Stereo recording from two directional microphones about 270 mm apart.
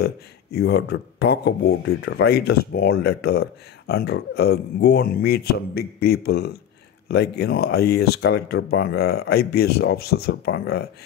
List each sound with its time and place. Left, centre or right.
0.0 s speech: left